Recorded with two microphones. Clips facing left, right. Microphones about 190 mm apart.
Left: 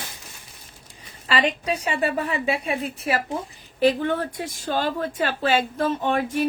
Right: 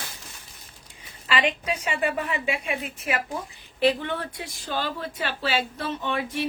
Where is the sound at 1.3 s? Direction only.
35° left (ahead or behind).